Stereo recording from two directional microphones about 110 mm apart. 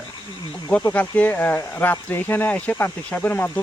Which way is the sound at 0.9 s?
15° left (ahead or behind).